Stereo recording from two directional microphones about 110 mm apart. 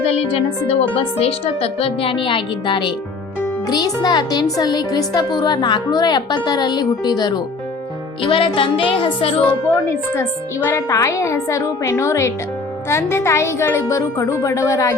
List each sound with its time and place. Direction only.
0.0 s a woman's voice: 65° left (ahead or behind); by 7.4 s 40° left (ahead or behind)
8.2 s a woman's voice: 55° left (ahead or behind)
10.2 s a woman's voice: 20° left (ahead or behind)